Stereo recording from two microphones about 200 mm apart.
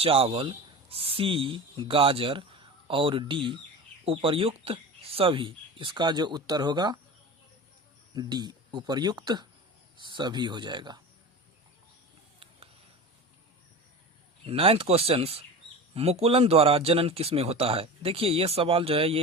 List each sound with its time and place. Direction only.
0.0 s speech: 30° right (ahead or behind)
8.1 s speech: 20° right (ahead or behind)
14.4 s speech: 30° right (ahead or behind)